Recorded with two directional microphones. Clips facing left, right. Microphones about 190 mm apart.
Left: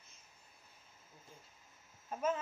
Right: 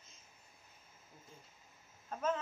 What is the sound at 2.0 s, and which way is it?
Speech, 10° left (ahead or behind).